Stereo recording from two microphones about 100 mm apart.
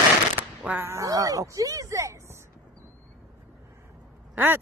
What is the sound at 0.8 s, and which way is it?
Speech, 30° right (ahead or behind).